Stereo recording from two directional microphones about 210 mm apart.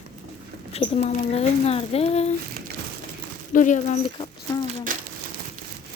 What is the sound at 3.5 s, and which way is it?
Speech, 35° left (ahead or behind).